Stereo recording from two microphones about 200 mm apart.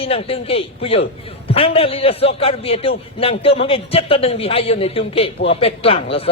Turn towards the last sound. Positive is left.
turn(degrees=30)  # may be behind; listen again after turning